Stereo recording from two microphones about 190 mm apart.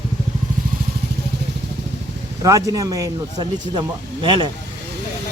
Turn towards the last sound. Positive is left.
turn(degrees=-25)  # may be behind; listen again after turning